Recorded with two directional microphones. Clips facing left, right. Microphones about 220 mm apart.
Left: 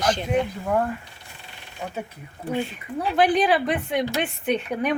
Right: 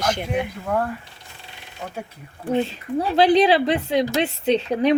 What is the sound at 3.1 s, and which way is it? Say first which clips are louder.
A woman's voice: right 4 dB; 25° right (ahead or behind).